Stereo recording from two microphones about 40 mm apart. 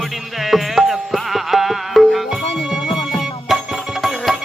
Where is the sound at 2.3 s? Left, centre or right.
Centre.